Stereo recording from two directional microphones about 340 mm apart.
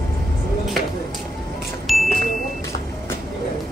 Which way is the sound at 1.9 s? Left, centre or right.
Centre.